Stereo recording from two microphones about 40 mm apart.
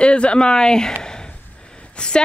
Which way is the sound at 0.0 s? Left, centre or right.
Left.